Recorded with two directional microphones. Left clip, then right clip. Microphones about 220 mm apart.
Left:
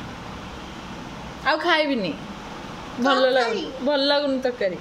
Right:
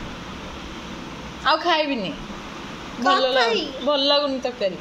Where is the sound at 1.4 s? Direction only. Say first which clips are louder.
Right 1 dB; 20° left (ahead or behind).